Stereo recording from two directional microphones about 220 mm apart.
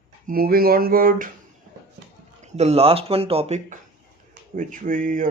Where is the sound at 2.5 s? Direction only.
30° right (ahead or behind).